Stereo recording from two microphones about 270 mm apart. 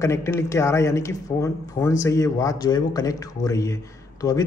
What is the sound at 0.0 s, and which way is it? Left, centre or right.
A man's voice, centre.